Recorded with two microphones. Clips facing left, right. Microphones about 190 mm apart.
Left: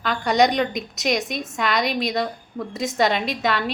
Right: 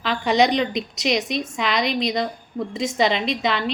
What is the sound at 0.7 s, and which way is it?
Speech, 45° left (ahead or behind).